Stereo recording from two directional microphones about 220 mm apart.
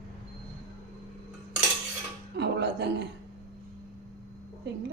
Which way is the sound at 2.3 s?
50° right (ahead or behind).